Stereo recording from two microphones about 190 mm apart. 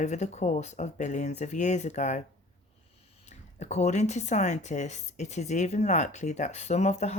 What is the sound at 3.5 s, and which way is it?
Speech, 35° left (ahead or behind).